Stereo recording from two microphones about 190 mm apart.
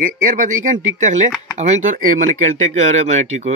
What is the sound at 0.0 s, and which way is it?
A man's voice, 45° right (ahead or behind).